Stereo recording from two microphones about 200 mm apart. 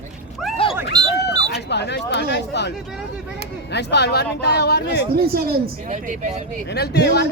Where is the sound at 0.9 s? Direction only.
20° right (ahead or behind).